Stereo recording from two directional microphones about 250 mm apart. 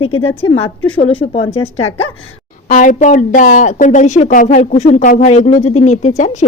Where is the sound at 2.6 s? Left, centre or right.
Left.